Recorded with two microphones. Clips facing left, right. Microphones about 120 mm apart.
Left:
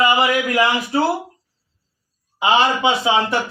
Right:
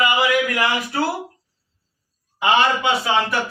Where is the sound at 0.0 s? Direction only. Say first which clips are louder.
Left 2 dB; 35° left (ahead or behind).